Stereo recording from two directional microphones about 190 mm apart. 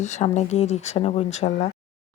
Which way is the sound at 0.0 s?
35° left (ahead or behind).